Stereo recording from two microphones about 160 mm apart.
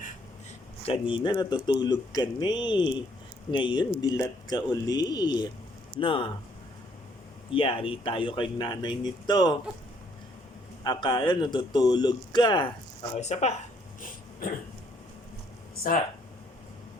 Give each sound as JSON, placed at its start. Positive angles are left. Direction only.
{"t": 0.8, "sound": "speech", "side_deg": 35}
{"t": 7.5, "sound": "speech", "side_deg": 35}
{"t": 10.8, "sound": "speech", "side_deg": 30}
{"t": 14.4, "sound": "throat clearing", "side_deg": 60}